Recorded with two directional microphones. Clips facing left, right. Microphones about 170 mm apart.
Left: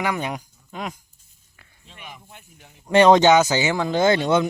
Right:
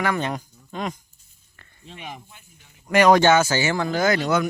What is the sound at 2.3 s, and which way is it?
Speech, 60° left (ahead or behind).